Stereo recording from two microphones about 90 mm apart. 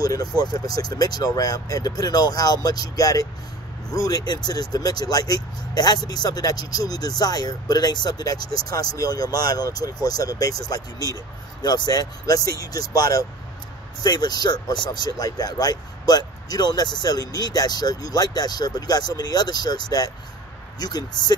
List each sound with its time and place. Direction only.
0.0 s speech: 45° left (ahead or behind)
11.6 s speech: 50° left (ahead or behind)